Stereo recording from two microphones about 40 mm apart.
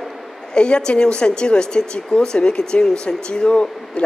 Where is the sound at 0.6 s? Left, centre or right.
Left.